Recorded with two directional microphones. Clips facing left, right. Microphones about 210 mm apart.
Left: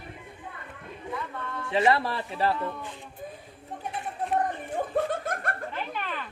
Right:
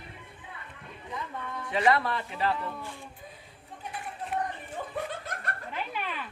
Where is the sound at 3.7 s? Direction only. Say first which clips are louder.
Left 5 dB; 50° left (ahead or behind).